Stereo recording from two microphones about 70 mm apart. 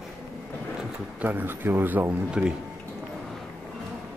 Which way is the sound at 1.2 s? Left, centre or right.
Right.